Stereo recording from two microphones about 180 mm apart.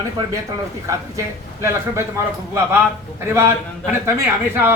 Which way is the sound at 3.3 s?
10° right (ahead or behind).